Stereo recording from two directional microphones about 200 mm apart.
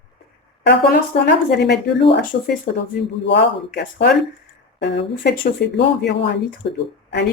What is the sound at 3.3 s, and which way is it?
Speech, 55° left (ahead or behind).